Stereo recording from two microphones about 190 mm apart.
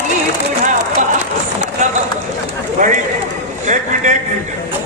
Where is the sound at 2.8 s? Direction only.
40° right (ahead or behind).